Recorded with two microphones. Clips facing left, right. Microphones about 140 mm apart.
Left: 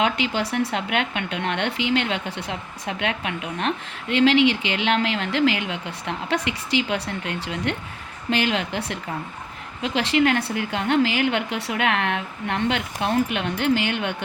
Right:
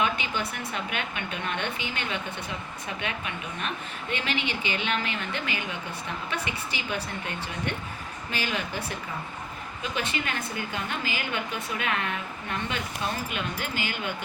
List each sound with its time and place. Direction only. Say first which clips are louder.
0.0 s a woman's voice: left 5 dB; 85° left
9.8 s a woman's voice: left 11 dB; 85° left